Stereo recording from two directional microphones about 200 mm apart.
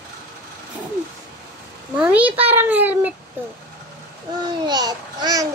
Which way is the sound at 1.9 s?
5° right (ahead or behind).